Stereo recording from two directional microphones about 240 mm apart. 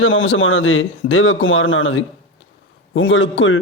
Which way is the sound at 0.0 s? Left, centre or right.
Left.